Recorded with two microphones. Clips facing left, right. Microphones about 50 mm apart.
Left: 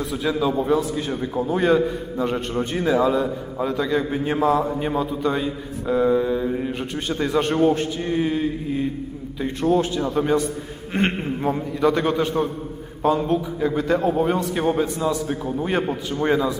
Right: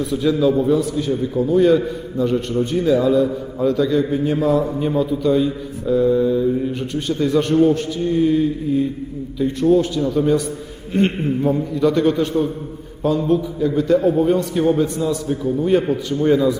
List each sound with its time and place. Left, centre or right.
0.1 s a man's voice: centre
0.6 s speech: left
4.3 s speech: left
11.9 s a man's voice: centre
13.0 s a man's voice: left